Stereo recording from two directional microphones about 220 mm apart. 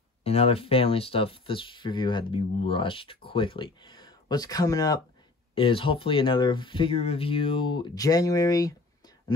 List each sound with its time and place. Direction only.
0.2 s speech: 25° left (ahead or behind)